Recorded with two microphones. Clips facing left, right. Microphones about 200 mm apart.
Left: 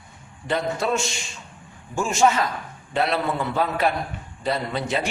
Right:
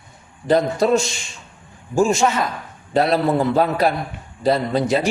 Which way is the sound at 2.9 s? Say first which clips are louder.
Right 6 dB; 40° right (ahead or behind).